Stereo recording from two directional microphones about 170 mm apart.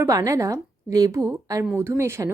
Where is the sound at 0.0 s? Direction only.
20° right (ahead or behind).